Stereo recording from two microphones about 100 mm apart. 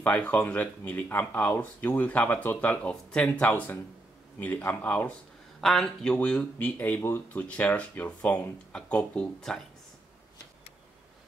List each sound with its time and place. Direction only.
0.0 s speech: 15° left (ahead or behind)
5.6 s speech: centre (ahead or behind); by 7.4 s 25° left (ahead or behind)
7.4 s speech: 15° left (ahead or behind)